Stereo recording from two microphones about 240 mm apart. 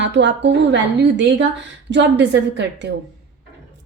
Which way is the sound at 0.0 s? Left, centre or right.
Right.